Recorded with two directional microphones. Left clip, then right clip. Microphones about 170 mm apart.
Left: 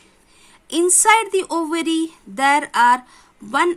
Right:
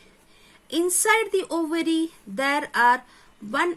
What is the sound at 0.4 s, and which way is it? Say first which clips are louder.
Speech: left 6 dB; 55° left (ahead or behind).